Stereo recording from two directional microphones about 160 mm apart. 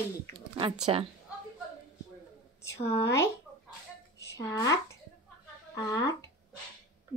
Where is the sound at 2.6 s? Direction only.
15° left (ahead or behind).